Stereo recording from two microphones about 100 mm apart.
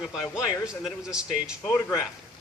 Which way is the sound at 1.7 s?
30° left (ahead or behind).